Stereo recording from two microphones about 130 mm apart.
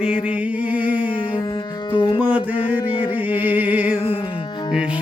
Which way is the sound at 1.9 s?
40° left (ahead or behind).